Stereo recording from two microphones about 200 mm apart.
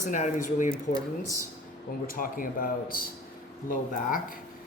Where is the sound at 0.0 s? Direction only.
40° left (ahead or behind).